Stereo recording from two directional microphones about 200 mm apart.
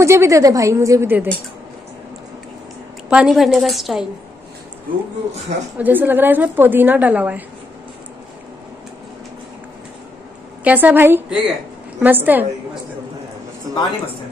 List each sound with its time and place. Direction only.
0.0 s a woman's voice: 15° right (ahead or behind)
3.1 s a woman's voice: 5° right (ahead or behind)
5.8 s a woman's voice: 10° right (ahead or behind)
10.6 s a woman's voice: 10° right (ahead or behind)